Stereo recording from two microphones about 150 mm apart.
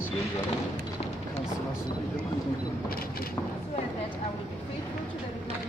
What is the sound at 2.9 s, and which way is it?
Vehicle, 85° left.